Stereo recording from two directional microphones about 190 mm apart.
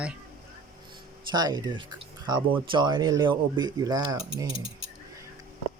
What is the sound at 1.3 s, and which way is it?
Speech, 20° right (ahead or behind).